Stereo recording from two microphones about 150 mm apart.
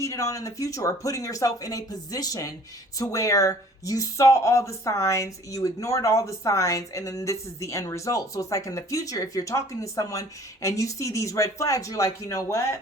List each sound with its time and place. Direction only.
0.0 s speech: 20° left (ahead or behind)